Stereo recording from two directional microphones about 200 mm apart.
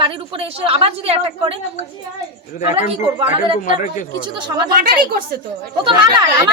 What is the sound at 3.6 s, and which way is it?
Speech, 40° left (ahead or behind).